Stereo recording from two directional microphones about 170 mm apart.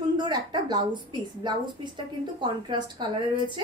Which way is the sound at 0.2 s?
25° right (ahead or behind).